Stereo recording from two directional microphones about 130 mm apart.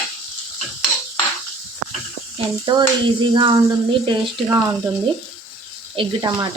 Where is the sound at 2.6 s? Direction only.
35° right (ahead or behind).